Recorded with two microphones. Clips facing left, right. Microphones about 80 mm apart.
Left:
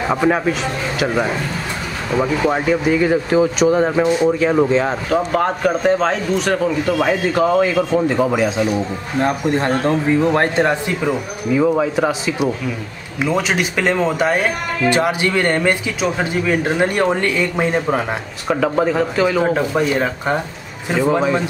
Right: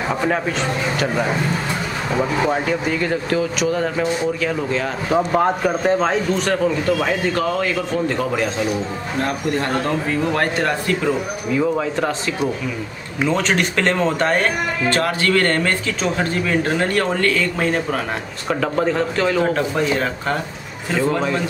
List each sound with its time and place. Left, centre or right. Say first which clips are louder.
0.1 s speech: left 5 dB; centre
2.5 s speech: left 4 dB; centre
5.1 s a man's voice: right 2 dB; centre
7.0 s speech: left 4 dB; centre
9.2 s speech: left 4 dB; left
18.5 s speech: left 3 dB; centre